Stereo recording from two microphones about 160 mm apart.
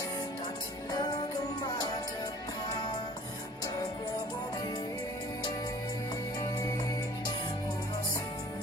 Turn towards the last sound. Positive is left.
turn(degrees=25)  # may be behind; listen again after turning